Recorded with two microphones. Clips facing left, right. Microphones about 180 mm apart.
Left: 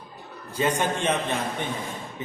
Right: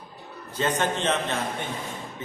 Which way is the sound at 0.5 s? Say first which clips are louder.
Left 1 dB; 10° left (ahead or behind).